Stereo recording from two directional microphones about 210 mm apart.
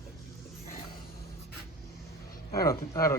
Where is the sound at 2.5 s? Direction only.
15° left (ahead or behind).